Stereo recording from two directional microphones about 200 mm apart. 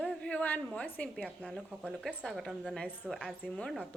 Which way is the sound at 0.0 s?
5° left (ahead or behind).